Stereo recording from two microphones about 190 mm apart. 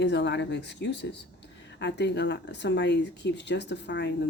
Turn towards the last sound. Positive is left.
turn(degrees=65)  # may be behind; listen again after turning